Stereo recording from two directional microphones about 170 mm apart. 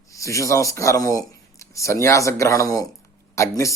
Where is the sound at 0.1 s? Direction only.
20° left (ahead or behind).